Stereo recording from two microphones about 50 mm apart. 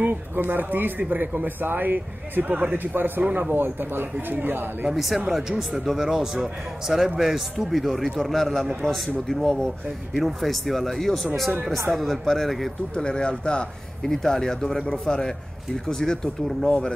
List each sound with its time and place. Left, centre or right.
0.0 s speech: right
2.4 s speech: right
2.8 s speech: right
4.9 s speech: centre
12.9 s speech: centre